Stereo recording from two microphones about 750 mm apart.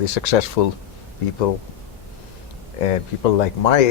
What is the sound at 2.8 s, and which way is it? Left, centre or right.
Speech, left.